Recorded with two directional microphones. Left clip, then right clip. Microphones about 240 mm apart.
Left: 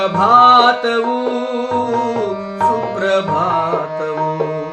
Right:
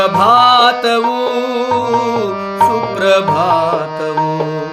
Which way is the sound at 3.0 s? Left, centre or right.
Right.